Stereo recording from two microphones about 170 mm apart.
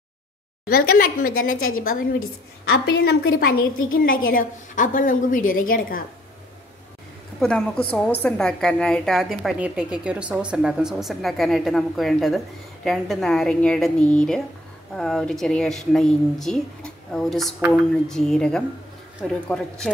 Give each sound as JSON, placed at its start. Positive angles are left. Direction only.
{"t": 0.7, "sound": "a woman's voice", "side_deg": 60}
{"t": 7.3, "sound": "a woman's voice", "side_deg": 5}